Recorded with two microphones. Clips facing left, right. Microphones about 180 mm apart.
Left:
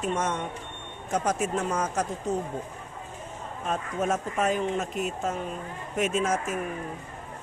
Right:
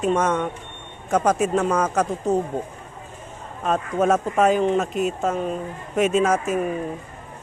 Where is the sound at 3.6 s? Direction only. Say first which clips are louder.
Right 8 dB; 85° right.